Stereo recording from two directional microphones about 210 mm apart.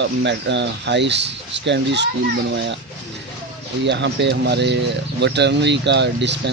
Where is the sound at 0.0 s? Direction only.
55° right (ahead or behind).